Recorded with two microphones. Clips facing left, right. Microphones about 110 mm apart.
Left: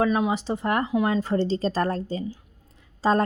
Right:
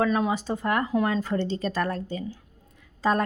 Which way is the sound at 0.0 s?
15° left (ahead or behind).